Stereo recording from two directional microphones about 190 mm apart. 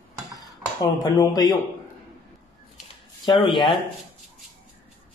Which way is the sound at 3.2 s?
20° left (ahead or behind).